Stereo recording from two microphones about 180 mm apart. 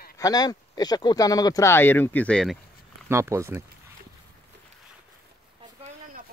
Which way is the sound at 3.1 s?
15° right (ahead or behind).